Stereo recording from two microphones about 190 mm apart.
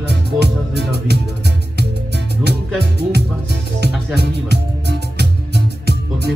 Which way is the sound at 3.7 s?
60° right (ahead or behind).